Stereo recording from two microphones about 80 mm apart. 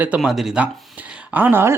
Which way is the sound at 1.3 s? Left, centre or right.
Right.